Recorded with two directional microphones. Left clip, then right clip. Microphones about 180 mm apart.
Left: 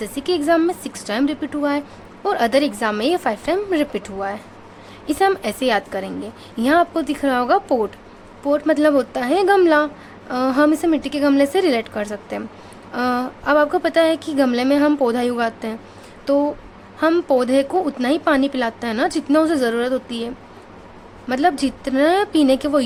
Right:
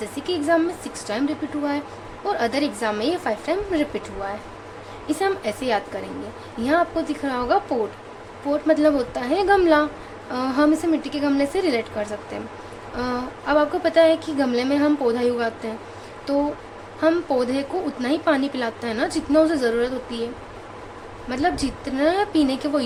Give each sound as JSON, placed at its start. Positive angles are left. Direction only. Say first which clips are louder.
{"t": 0.0, "sound": "speech", "louder": "left 4 dB", "side_deg": 40}
{"t": 21.2, "sound": "speech", "louder": "left 5 dB", "side_deg": 40}